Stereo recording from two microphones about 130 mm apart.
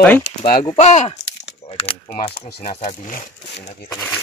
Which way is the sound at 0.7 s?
55° left (ahead or behind).